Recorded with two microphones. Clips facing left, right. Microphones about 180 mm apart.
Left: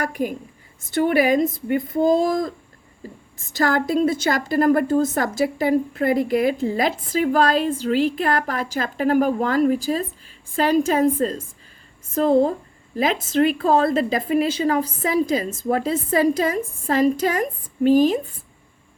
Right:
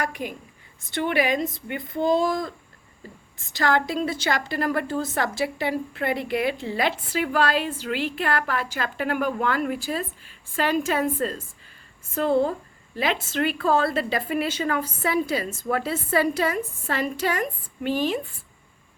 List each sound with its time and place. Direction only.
0.0 s a woman's voice: 45° left (ahead or behind)
3.5 s a woman's voice: 45° left (ahead or behind)